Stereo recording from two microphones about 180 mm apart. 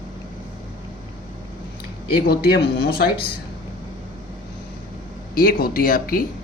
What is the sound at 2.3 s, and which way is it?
Speech, 60° left (ahead or behind).